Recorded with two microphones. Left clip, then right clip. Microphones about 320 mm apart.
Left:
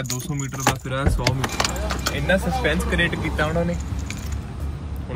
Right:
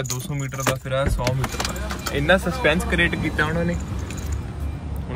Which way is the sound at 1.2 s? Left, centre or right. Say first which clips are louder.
Left 2 dB; left.